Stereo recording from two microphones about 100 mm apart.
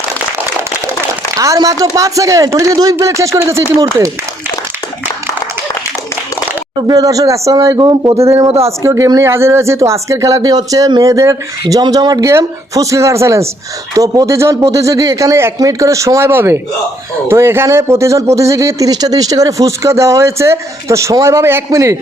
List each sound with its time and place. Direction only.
1.4 s speech: 35° right (ahead or behind)
6.8 s speech: 35° right (ahead or behind)
8.1 s speech: 30° right (ahead or behind)